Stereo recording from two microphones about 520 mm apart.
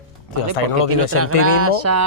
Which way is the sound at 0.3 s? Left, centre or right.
Left.